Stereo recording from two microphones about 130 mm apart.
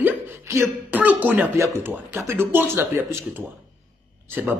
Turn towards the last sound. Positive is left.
turn(degrees=-15)  # may be behind; listen again after turning